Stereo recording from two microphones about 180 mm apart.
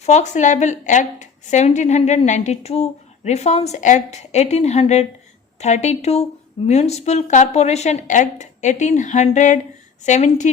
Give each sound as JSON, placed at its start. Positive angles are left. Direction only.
{"t": 0.0, "sound": "a woman's voice", "side_deg": 40}